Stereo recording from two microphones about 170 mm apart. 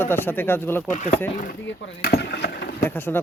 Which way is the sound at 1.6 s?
90° left.